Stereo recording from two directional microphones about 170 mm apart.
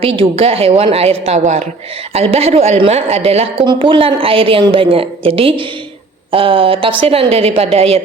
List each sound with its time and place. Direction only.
0.2 s a woman's voice: 35° right (ahead or behind)